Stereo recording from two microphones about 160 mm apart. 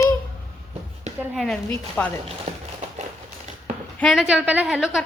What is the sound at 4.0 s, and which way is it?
Speech, centre (ahead or behind).